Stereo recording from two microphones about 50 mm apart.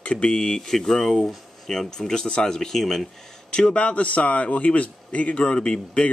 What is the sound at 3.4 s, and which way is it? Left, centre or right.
Speech, centre.